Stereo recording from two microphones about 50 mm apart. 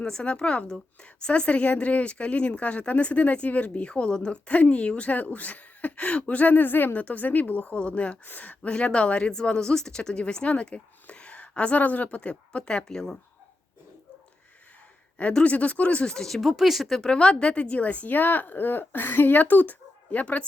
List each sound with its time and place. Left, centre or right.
0.0 s a woman's voice: centre
15.4 s a woman's voice: left
16.1 s speech: centre
16.4 s speech: centre
17.1 s a woman's voice: centre